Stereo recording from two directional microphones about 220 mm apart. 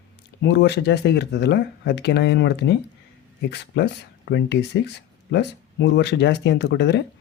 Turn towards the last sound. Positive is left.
turn(degrees=50)  # may be behind; listen again after turning